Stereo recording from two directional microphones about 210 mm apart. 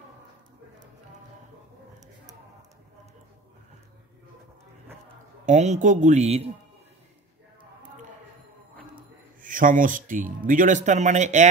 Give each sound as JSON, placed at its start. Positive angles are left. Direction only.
{"t": 5.4, "sound": "speech", "side_deg": -35}
{"t": 9.4, "sound": "speech", "side_deg": -40}